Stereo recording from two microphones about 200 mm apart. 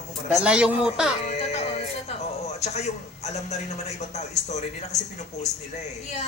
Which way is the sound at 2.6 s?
35° left (ahead or behind).